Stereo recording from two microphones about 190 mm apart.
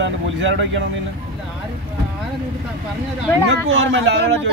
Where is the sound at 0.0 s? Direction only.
75° right (ahead or behind).